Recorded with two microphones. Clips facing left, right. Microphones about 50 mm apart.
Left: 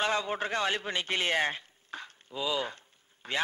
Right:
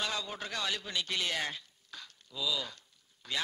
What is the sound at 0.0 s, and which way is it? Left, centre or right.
A man's voice, left.